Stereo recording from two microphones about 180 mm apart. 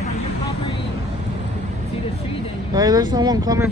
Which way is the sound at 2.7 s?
20° right (ahead or behind).